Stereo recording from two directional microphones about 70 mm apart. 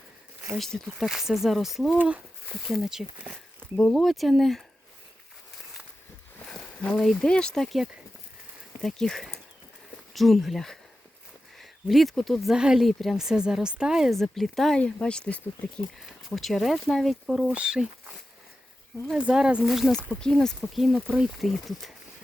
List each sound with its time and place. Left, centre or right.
0.5 s speech: centre
2.0 s speech: right
2.5 s speech: centre
3.8 s speech: centre
7.2 s speech: centre
12.8 s speech: centre
14.8 s speech: centre
16.0 s speech: centre
19.1 s speech: centre
20.1 s speech: centre
20.9 s speech: centre
21.3 s speech: centre